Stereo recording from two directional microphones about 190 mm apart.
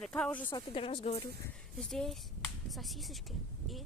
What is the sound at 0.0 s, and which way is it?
Speech, 5° left (ahead or behind).